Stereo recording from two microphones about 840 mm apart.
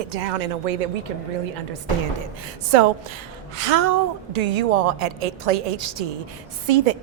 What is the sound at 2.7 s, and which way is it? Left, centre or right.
A woman's voice, right.